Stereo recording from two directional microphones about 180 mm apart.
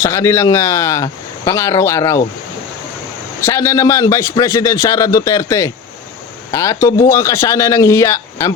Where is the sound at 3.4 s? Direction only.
15° left (ahead or behind).